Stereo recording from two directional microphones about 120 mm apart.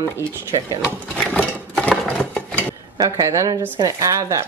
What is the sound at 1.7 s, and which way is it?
Sewing machine, 5° left (ahead or behind).